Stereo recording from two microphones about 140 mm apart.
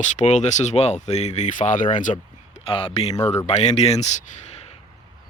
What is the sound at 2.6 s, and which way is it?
Speech, 40° left (ahead or behind).